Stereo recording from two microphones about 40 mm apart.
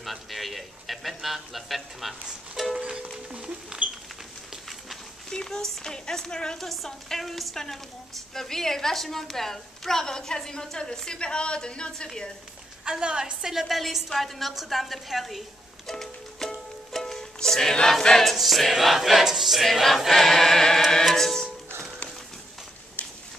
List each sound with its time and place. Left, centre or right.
0.0 s choir: centre
2.6 s music: centre
2.9 s music: right
5.3 s a woman's voice: centre
6.6 s choir: centre
8.4 s a woman's voice: centre
12.9 s a woman's voice: right
13.4 s choir: centre
15.9 s music: centre
18.0 s choir: centre
21.1 s a woman's voice: centre